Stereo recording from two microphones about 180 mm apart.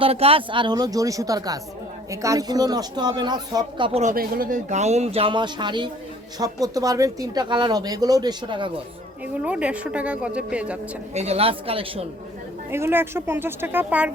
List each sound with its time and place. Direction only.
0.0 s speech: 35° right (ahead or behind)
4.0 s speech: 55° right (ahead or behind); by 8.7 s 25° right (ahead or behind)
9.2 s a woman's voice: 5° right (ahead or behind)
11.1 s speech: 35° right (ahead or behind)
12.7 s a woman's voice: 10° right (ahead or behind)